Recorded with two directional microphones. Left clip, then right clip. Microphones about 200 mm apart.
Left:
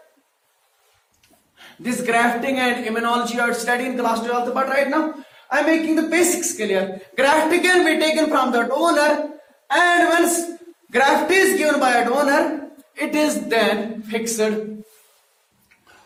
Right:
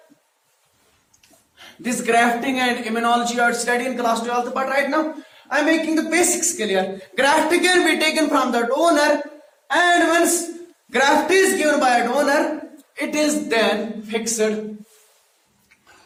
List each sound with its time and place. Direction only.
1.5 s a man's voice: 15° right (ahead or behind)
11.5 s a man's voice: centre (ahead or behind); by 14.5 s 20° left (ahead or behind)